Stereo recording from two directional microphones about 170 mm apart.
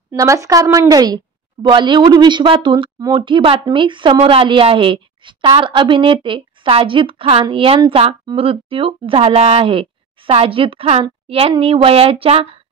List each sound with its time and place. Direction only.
0.1 s a woman's voice: 20° right (ahead or behind); by 12.4 s 35° right (ahead or behind)